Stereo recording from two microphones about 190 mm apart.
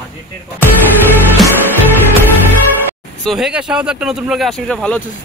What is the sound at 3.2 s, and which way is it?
Speech, centre (ahead or behind).